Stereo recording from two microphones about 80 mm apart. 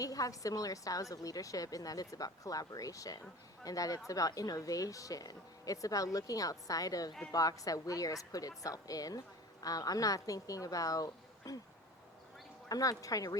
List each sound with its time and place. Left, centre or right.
0.0 s a woman's voice: left
12.6 s a woman's voice: left